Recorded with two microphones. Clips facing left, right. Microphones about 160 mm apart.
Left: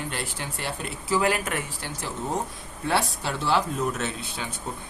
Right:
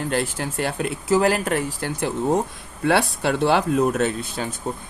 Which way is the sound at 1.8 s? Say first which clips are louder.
Right 9 dB; 60° right (ahead or behind).